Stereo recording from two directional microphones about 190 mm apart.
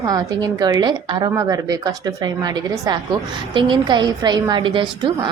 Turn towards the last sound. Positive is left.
turn(degrees=-25)  # may be behind; listen again after turning